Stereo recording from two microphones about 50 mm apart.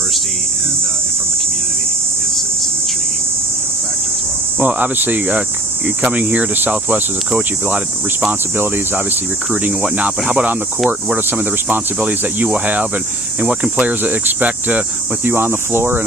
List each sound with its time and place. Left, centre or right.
4.6 s speech: right
6.0 s cricket: right
8.3 s speech: right
9.5 s cricket: right
10.8 s speech: right
11.9 s cricket: right
13.7 s speech: right
15.2 s speech: right